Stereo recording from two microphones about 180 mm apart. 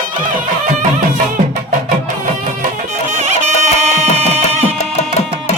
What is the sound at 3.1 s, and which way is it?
Music, 40° right (ahead or behind).